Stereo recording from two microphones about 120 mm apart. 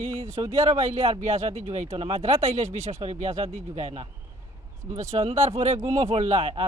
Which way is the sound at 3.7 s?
60° right (ahead or behind).